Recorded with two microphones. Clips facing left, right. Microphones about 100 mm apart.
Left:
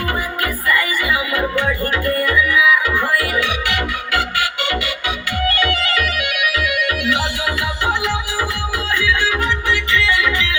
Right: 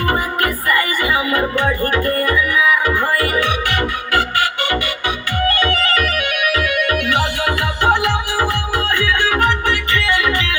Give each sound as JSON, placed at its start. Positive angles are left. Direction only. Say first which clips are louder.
{"t": 0.4, "sound": "music", "louder": "left 1 dB", "side_deg": -50}
{"t": 5.9, "sound": "music", "louder": "right 2 dB", "side_deg": -40}